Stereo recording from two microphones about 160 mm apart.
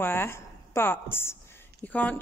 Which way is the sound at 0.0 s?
15° left (ahead or behind).